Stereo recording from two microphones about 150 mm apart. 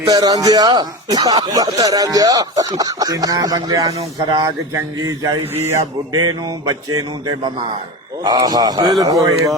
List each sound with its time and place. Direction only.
0.1 s speech: 25° right (ahead or behind)
8.2 s speech: 25° right (ahead or behind)